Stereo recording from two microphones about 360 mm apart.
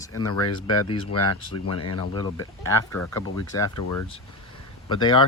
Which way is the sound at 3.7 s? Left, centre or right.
Left.